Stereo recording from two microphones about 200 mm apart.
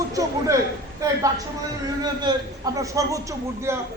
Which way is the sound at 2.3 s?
20° right (ahead or behind).